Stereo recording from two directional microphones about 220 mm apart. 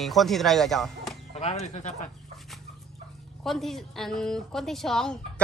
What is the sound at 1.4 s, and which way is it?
Speech, 30° left (ahead or behind).